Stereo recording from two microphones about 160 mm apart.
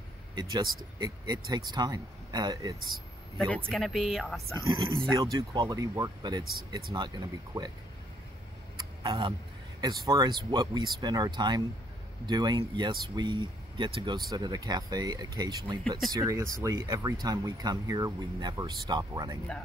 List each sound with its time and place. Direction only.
0.4 s speech: 25° right (ahead or behind)
3.4 s speech: 5° left (ahead or behind)
4.6 s speech: 25° right (ahead or behind)
9.0 s speech: 35° right (ahead or behind)